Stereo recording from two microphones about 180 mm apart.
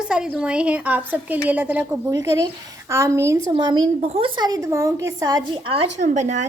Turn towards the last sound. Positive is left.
turn(degrees=-40)  # may be behind; listen again after turning